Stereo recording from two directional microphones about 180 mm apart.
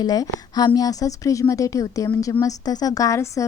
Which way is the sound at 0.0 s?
20° left (ahead or behind).